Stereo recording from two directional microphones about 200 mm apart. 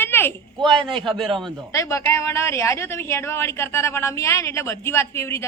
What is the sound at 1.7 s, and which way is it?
A woman's voice, 15° left (ahead or behind).